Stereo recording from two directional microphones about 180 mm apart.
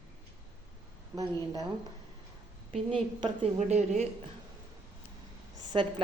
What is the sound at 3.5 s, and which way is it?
Speech, 40° right (ahead or behind).